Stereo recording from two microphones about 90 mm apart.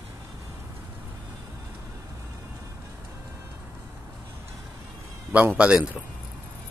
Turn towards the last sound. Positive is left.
turn(degrees=-10)  # may be behind; listen again after turning